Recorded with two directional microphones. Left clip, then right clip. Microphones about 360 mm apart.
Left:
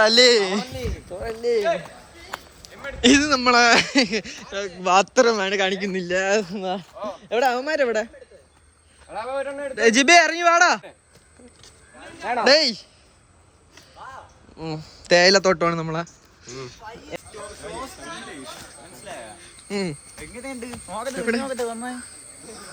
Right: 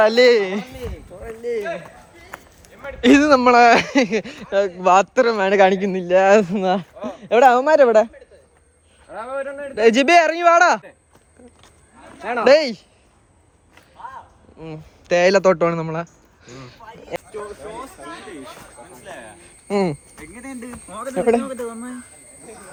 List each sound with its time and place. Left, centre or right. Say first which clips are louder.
0.0 s speech: right 2 dB; centre
2.3 s a sound: left 4 dB; centre
3.2 s speech: right 8 dB; centre
5.5 s speech: right 8 dB; centre
9.7 s speech: right 2 dB; centre
12.2 s speech: right 1 dB; right
12.5 s speech: right 4 dB; centre
14.6 s speech: left 3 dB; centre
19.4 s cricket: right 9 dB; centre
20.1 s speech: left 1 dB; centre
21.2 s speech: right 8 dB; centre
21.4 s speech: left 1 dB; left